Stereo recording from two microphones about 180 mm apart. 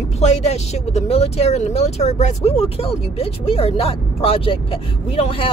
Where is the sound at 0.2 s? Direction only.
35° left (ahead or behind).